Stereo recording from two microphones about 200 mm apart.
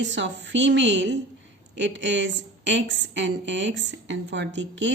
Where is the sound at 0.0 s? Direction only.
65° right (ahead or behind).